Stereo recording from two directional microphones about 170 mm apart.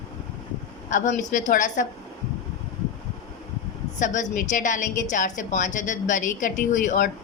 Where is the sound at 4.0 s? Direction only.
45° left (ahead or behind).